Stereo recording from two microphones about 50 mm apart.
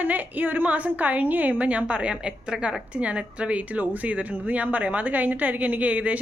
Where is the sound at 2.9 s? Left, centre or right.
Right.